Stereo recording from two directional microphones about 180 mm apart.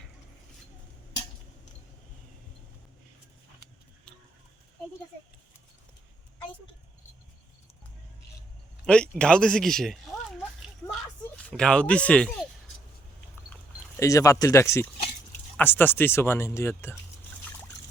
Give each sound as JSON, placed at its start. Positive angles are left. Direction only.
{"t": 8.9, "sound": "speech", "side_deg": 5}
{"t": 11.5, "sound": "speech", "side_deg": 5}
{"t": 13.5, "sound": "speech", "side_deg": 15}